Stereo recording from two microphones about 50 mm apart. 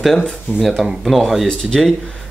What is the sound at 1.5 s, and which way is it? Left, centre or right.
Speech, centre.